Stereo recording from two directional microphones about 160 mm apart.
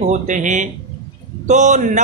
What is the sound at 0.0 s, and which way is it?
Speech, 50° right (ahead or behind).